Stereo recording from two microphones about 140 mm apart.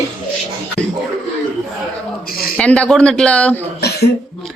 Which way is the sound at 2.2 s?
90° left.